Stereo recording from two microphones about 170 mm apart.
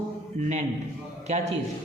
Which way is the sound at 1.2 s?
40° right (ahead or behind).